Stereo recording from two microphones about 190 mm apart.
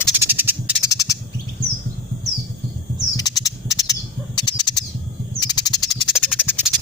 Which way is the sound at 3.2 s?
20° left (ahead or behind).